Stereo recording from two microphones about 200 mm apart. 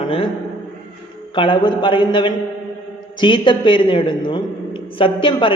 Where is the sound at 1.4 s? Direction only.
25° left (ahead or behind).